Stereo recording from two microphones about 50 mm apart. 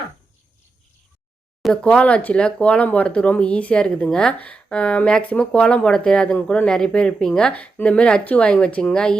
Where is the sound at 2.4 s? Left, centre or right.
Left.